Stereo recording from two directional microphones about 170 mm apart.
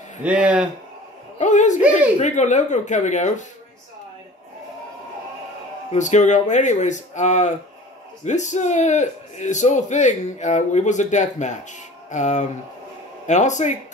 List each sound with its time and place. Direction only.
0.2 s a man's voice: 5° right (ahead or behind)
1.4 s a man's voice: 45° left (ahead or behind)
1.8 s a man's voice: 10° right (ahead or behind)
2.1 s a man's voice: 45° left (ahead or behind)
5.9 s a man's voice: 45° left (ahead or behind)